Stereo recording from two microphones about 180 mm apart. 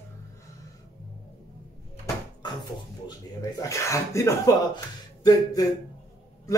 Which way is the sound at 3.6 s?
15° left (ahead or behind).